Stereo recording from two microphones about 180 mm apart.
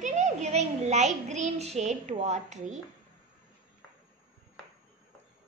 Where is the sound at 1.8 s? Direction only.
40° right (ahead or behind).